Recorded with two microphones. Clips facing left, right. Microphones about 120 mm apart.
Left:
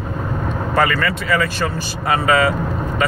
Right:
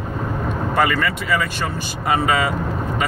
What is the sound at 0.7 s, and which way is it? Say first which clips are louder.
Speech: left 2 dB; 10° right (ahead or behind).